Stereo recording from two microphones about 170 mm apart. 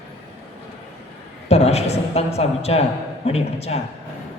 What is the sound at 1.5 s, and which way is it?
Speech, 40° left (ahead or behind).